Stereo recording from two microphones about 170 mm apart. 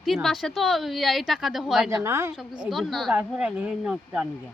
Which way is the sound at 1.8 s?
15° right (ahead or behind).